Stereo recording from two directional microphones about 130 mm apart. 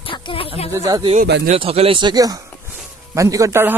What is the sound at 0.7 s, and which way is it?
Speech, 25° right (ahead or behind).